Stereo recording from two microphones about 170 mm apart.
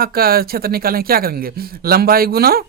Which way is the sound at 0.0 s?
60° right (ahead or behind).